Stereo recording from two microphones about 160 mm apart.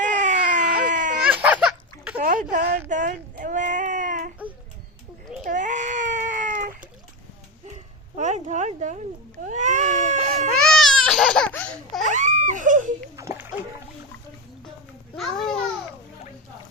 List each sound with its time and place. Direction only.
0.0 s baby cry: 50° right (ahead or behind)
1.3 s a sound: 10° right (ahead or behind)
2.1 s speech: 60° right (ahead or behind)
2.9 s a sound: 55° right (ahead or behind)
5.5 s baby cry: 50° right (ahead or behind)
8.1 s speech: 45° right (ahead or behind)
9.5 s cat: 50° right (ahead or behind)
10.5 s baby cry: centre (ahead or behind)
12.0 s baby cry: 50° right (ahead or behind)
13.1 s splash: 15° right (ahead or behind)